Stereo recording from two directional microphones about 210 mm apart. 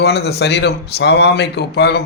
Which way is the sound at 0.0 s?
50° left (ahead or behind).